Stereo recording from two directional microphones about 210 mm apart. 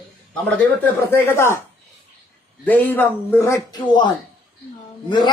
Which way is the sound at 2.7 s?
10° left (ahead or behind).